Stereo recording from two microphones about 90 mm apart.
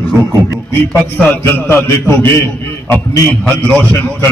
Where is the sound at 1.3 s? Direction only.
20° left (ahead or behind).